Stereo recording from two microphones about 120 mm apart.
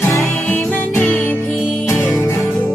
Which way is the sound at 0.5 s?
15° left (ahead or behind).